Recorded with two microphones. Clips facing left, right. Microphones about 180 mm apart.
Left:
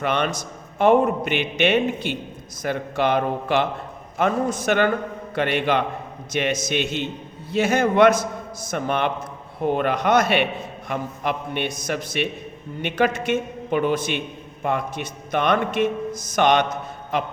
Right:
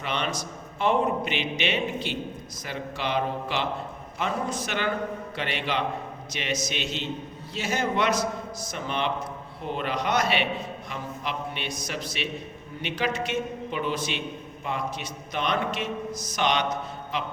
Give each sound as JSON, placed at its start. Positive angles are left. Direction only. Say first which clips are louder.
{"t": 0.0, "sound": "a man's voice", "louder": "left 6 dB", "side_deg": 50}